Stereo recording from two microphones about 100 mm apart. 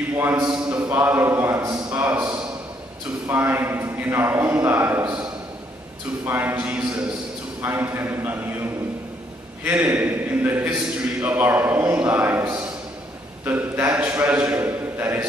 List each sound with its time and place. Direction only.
0.1 s a man's voice: 20° right (ahead or behind)
2.0 s a man's voice: 15° right (ahead or behind)
6.2 s a man's voice: 20° right (ahead or behind)
9.7 s a man's voice: 15° right (ahead or behind)